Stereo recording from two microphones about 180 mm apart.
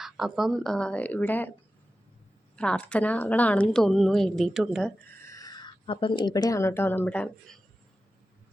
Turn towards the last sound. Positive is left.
turn(degrees=5)  # may be behind; listen again after turning